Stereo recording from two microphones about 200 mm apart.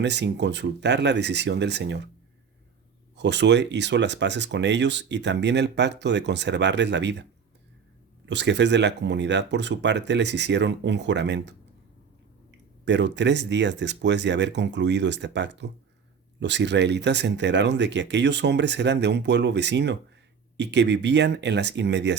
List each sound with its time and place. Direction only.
0.0 s speech: 60° right (ahead or behind)
3.2 s speech: 60° right (ahead or behind)
8.3 s speech: 60° right (ahead or behind)
12.8 s speech: 60° right (ahead or behind)